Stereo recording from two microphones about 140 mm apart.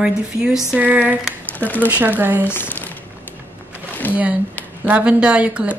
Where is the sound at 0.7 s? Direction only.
10° right (ahead or behind).